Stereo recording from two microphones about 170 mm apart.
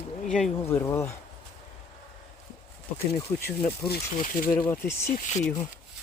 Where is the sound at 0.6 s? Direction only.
15° left (ahead or behind).